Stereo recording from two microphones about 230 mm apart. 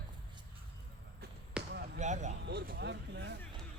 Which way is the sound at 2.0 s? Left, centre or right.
Right.